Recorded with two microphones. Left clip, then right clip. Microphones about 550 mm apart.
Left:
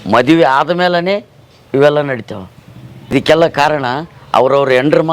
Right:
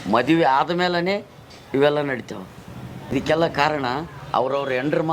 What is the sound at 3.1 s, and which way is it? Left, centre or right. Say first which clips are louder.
A man's voice: left 10 dB; left.